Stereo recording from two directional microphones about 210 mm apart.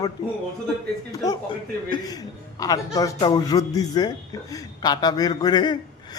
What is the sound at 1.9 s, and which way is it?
A man's voice, 20° left (ahead or behind).